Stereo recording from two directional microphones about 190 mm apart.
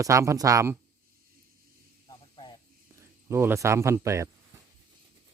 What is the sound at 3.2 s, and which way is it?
Speech, 15° right (ahead or behind).